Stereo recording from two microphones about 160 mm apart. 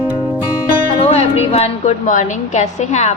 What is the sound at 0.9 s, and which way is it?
Music, 40° left (ahead or behind).